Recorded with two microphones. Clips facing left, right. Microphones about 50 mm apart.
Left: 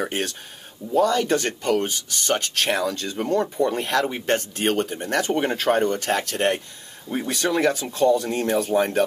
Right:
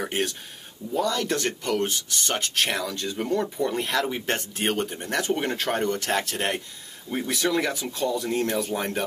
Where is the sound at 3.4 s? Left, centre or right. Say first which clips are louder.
Left 4 dB; centre.